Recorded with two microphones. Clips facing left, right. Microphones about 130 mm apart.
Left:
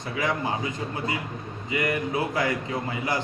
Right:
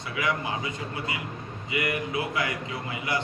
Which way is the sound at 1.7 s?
40° left (ahead or behind).